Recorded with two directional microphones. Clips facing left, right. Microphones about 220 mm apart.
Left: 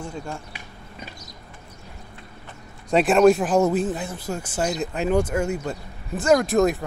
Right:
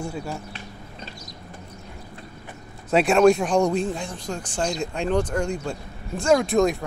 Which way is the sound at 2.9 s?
Centre (ahead or behind).